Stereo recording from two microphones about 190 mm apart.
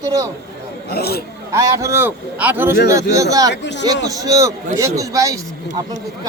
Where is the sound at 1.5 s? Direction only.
15° right (ahead or behind).